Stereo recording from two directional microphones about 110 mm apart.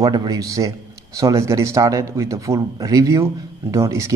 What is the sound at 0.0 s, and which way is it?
A man's voice, 35° right (ahead or behind).